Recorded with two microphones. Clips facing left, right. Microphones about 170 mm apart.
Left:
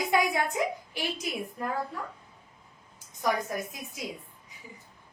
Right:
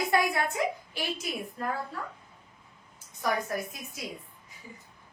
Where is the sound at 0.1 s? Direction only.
15° left (ahead or behind).